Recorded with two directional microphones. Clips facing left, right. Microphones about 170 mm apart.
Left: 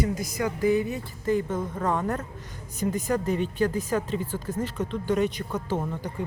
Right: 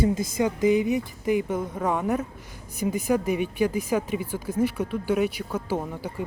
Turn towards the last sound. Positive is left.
turn(degrees=-10)  # may be behind; listen again after turning